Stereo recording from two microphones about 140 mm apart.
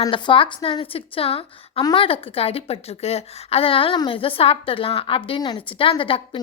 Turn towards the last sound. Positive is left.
turn(degrees=40)  # may be behind; listen again after turning